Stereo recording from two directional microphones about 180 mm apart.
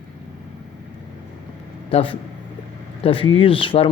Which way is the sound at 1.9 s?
30° left (ahead or behind).